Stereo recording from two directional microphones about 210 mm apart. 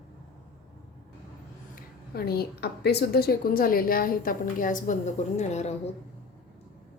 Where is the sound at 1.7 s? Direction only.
50° left (ahead or behind); by 5.7 s 30° left (ahead or behind).